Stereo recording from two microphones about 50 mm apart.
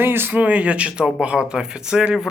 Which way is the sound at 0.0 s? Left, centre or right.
Right.